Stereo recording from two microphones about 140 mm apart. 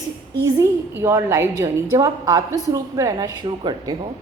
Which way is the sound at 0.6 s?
20° right (ahead or behind).